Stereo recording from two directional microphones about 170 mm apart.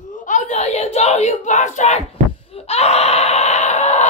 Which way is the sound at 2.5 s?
35° left (ahead or behind).